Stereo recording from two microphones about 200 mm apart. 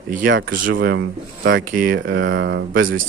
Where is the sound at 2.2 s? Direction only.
65° right (ahead or behind).